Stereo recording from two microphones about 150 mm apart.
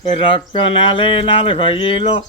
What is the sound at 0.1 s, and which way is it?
Speech, 35° left (ahead or behind).